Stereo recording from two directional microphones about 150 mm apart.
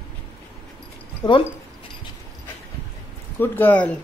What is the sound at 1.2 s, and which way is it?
Speech, 25° left (ahead or behind).